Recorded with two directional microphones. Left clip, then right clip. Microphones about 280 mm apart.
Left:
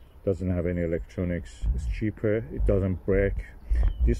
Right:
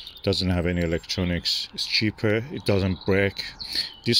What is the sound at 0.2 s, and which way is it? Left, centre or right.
Speech, right.